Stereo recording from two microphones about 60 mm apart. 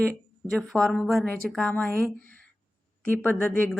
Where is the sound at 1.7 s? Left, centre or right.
Left.